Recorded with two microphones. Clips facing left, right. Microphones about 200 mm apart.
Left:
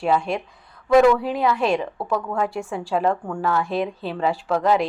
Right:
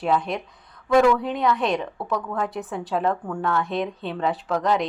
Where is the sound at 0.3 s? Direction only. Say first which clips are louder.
Left 3 dB; centre (ahead or behind).